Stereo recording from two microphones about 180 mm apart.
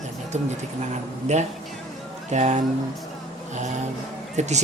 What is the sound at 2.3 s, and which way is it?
Speech, 40° right (ahead or behind).